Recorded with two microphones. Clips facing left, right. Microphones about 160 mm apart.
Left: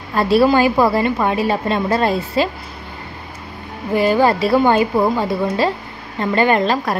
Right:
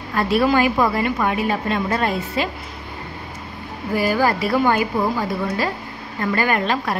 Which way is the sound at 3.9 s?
25° left (ahead or behind).